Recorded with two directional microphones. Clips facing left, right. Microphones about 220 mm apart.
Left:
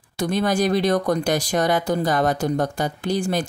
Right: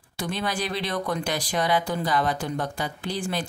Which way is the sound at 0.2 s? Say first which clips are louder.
Left 8 dB; 45° left (ahead or behind).